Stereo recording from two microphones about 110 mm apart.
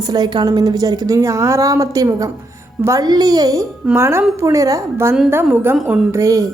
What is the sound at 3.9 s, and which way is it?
Speech, 25° right (ahead or behind).